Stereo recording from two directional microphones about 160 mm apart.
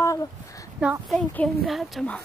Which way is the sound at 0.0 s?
20° left (ahead or behind).